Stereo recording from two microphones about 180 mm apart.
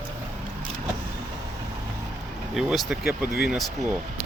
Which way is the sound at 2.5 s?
Centre (ahead or behind).